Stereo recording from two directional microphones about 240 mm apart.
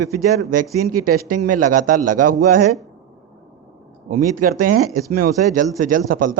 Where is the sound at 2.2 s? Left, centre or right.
Right.